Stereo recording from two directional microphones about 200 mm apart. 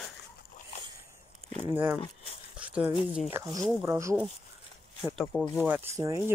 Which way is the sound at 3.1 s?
5° right (ahead or behind).